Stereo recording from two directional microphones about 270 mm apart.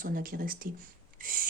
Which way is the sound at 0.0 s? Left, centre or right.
Right.